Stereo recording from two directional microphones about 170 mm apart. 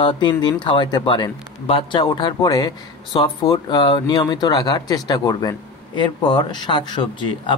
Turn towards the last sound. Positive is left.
turn(degrees=30)  # may be behind; listen again after turning